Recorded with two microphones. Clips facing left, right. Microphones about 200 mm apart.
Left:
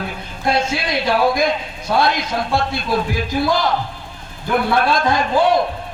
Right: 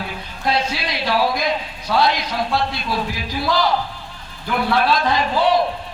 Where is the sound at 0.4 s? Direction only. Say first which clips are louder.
Left 3 dB; 50° left (ahead or behind).